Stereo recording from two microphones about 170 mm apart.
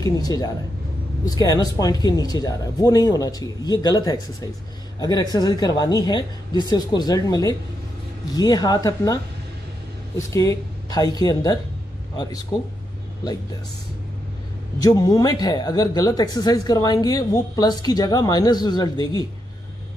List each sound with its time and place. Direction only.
0.0 s speech: 20° left (ahead or behind)
14.8 s speech: 20° left (ahead or behind)